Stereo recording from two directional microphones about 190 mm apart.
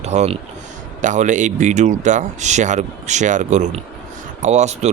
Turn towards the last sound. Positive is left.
turn(degrees=-35)  # may be behind; listen again after turning